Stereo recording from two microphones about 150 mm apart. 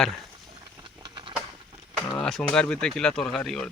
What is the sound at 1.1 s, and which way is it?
Patter, 30° right (ahead or behind).